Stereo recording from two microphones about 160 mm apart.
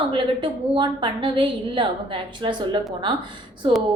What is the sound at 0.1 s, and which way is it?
A woman's voice, 30° right (ahead or behind).